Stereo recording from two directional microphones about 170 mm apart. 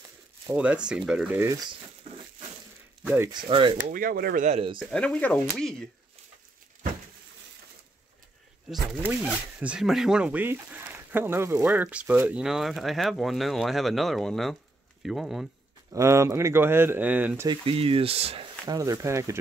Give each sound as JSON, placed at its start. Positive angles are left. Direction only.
{"t": 0.5, "sound": "speech", "side_deg": -5}
{"t": 3.0, "sound": "speech", "side_deg": -10}
{"t": 3.3, "sound": "speech", "side_deg": -30}
{"t": 3.8, "sound": "speech", "side_deg": -55}
{"t": 4.5, "sound": "speech", "side_deg": -35}
{"t": 4.7, "sound": "speech", "side_deg": 5}
{"t": 8.6, "sound": "speech", "side_deg": 0}
{"t": 15.9, "sound": "speech", "side_deg": -15}
{"t": 17.5, "sound": "speech", "side_deg": -30}
{"t": 18.7, "sound": "speech", "side_deg": -20}